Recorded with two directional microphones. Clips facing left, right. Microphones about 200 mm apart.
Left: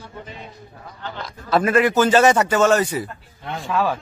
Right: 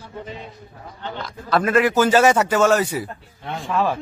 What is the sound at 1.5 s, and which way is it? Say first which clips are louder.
A man's voice: left 1 dB; 5° left (ahead or behind).